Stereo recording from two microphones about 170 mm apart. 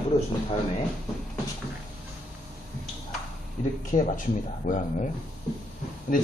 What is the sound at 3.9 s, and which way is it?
Speech, 45° left (ahead or behind).